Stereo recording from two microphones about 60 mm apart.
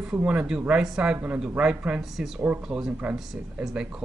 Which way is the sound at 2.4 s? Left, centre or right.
Right.